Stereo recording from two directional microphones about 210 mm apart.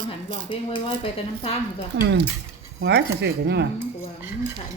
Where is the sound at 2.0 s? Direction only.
55° right (ahead or behind).